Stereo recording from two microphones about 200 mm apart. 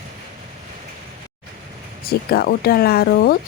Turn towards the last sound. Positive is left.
turn(degrees=50)  # may be behind; listen again after turning